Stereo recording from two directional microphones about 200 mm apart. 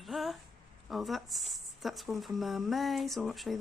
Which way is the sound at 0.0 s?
Centre (ahead or behind).